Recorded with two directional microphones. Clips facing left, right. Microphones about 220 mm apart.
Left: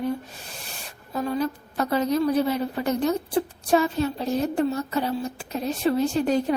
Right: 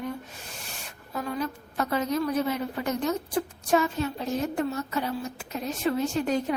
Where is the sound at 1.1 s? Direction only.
30° left (ahead or behind).